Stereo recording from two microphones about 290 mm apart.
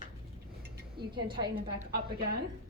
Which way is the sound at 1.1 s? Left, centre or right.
Centre.